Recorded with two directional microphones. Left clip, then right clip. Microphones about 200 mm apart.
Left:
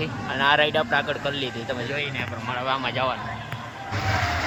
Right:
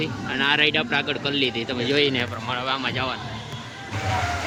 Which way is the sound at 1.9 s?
20° right (ahead or behind).